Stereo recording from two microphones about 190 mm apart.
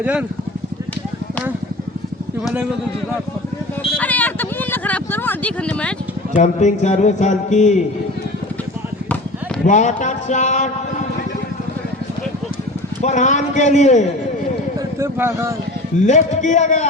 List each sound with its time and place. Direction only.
0.0 s speech: 5° right (ahead or behind)
4.0 s a sound: 10° left (ahead or behind)
6.3 s speech: 40° left (ahead or behind)
9.6 s speech: 40° left (ahead or behind)
13.0 s speech: 40° left (ahead or behind)
14.9 s speech: 15° right (ahead or behind)
16.0 s speech: 40° left (ahead or behind)